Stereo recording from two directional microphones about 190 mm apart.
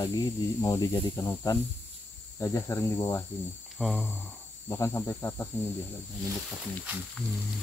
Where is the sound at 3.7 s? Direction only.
Centre (ahead or behind).